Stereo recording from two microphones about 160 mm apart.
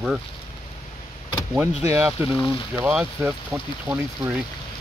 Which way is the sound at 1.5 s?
10° right (ahead or behind).